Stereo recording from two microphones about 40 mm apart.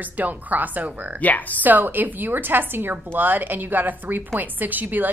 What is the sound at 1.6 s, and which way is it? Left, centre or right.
A woman's voice, right.